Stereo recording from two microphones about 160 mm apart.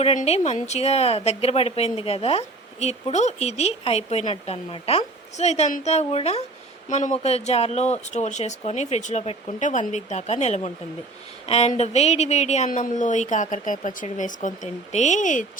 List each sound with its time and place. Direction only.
0.0 s a woman's voice: 40° left (ahead or behind)